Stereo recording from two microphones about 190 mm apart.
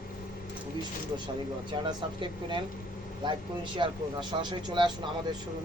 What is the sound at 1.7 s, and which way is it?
Speech, 25° right (ahead or behind).